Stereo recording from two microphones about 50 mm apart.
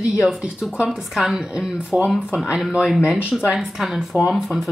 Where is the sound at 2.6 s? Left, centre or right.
Centre.